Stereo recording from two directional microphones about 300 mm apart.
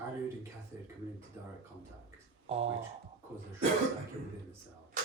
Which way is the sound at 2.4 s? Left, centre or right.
Right.